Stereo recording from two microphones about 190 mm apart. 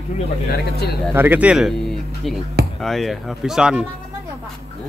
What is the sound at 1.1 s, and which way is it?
Speech, 10° right (ahead or behind).